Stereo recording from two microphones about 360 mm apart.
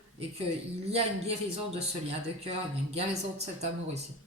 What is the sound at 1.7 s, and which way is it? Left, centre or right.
Speech, centre.